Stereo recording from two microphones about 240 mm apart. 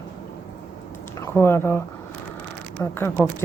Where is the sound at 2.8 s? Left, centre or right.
Centre.